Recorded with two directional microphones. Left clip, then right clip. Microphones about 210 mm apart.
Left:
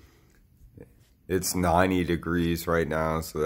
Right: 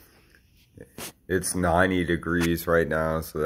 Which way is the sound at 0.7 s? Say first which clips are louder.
Right 12 dB; centre (ahead or behind).